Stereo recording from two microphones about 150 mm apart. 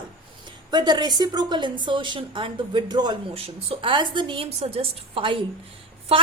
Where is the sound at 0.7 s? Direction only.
30° right (ahead or behind).